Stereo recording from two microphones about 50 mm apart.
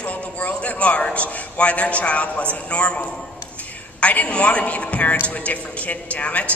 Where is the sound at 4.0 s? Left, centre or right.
Left.